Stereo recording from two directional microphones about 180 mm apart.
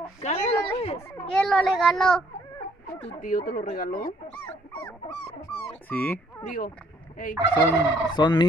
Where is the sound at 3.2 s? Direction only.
50° left (ahead or behind).